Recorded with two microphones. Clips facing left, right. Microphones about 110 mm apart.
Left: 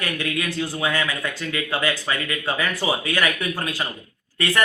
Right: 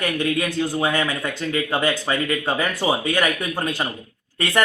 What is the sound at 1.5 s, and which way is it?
A man's voice, 25° right (ahead or behind).